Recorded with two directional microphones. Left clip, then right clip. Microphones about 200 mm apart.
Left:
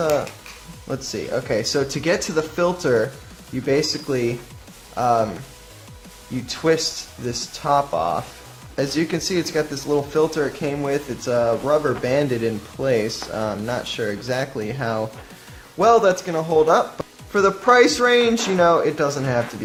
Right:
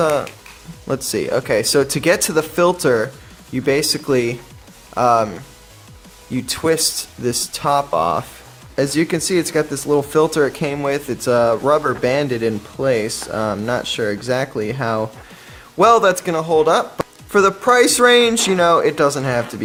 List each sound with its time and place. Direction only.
0.0 s speech: 35° right (ahead or behind)
6.5 s speech: 35° right (ahead or behind)